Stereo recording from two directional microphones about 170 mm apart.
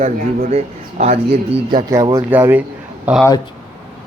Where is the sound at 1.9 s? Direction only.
20° right (ahead or behind).